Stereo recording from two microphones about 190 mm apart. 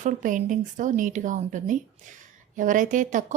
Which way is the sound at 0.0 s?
40° right (ahead or behind).